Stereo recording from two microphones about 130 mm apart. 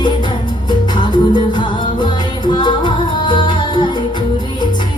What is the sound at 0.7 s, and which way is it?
Music, 35° left (ahead or behind).